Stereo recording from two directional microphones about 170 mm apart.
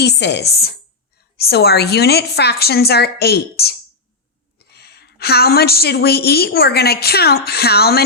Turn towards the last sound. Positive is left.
turn(degrees=65)  # may be behind; listen again after turning